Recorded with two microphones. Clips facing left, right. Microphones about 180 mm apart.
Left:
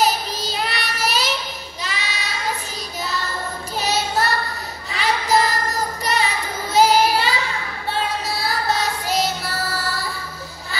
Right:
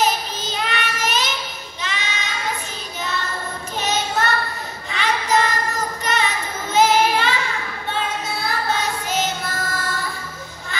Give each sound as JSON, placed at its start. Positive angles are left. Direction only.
{"t": 0.0, "sound": "child singing", "side_deg": 35}
{"t": 3.8, "sound": "child singing", "side_deg": 35}
{"t": 8.3, "sound": "female singing", "side_deg": 35}